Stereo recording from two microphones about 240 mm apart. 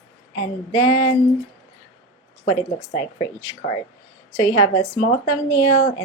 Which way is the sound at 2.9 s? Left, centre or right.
Centre.